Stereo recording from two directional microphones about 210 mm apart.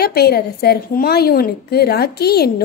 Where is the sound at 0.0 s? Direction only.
45° left (ahead or behind).